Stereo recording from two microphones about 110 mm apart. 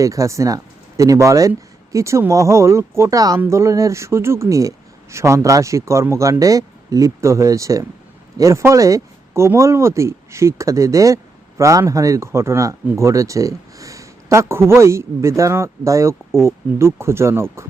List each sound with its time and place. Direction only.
0.0 s speech: 30° right (ahead or behind)